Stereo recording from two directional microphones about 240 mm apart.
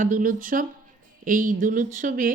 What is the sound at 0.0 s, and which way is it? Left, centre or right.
Speech, right.